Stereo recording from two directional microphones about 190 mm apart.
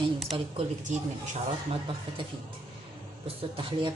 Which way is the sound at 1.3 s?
30° right (ahead or behind).